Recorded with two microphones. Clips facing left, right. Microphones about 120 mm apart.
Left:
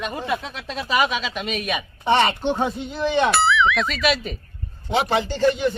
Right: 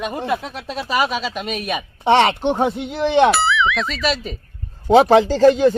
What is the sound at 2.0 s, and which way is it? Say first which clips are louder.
Speech: right 4 dB; 80° right.